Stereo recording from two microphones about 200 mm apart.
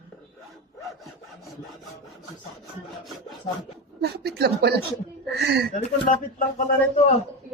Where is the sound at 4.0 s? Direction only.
55° right (ahead or behind).